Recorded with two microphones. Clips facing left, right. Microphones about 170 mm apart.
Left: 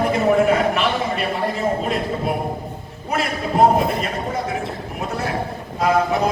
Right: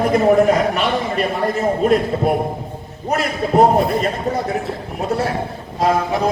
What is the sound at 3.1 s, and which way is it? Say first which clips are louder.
Speech: right 4 dB; 40° right (ahead or behind).